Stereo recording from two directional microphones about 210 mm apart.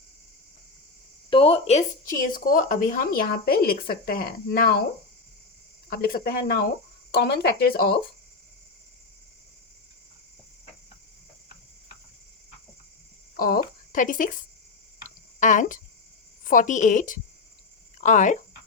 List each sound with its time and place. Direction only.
1.3 s speech: 25° left (ahead or behind); by 4.8 s 45° left (ahead or behind)
5.9 s speech: 45° left (ahead or behind)
13.3 s speech: 45° left (ahead or behind)
15.0 s a sound: 35° left (ahead or behind)
16.4 s a woman's voice: 40° left (ahead or behind)